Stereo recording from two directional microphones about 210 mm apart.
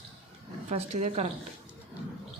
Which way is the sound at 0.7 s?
30° right (ahead or behind).